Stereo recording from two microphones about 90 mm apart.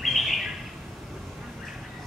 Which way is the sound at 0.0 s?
Centre (ahead or behind).